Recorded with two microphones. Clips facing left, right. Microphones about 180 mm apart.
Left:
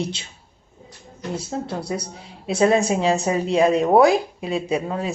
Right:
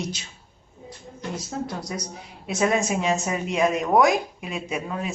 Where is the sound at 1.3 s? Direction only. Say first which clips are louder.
Left 4 dB; 30° left (ahead or behind).